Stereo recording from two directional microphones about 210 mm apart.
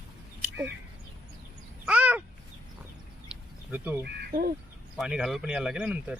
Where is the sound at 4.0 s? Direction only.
45° right (ahead or behind).